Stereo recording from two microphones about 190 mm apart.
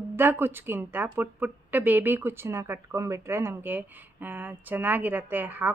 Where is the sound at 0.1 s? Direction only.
10° right (ahead or behind).